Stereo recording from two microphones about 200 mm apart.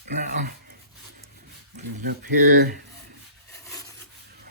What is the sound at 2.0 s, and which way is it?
Speech, 50° right (ahead or behind).